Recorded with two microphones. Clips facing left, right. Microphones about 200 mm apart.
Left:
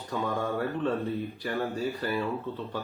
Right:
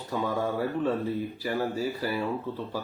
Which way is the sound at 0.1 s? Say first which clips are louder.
Right 1 dB; 5° right (ahead or behind).